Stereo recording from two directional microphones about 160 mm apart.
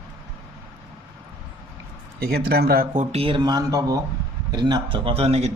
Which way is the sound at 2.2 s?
75° right (ahead or behind).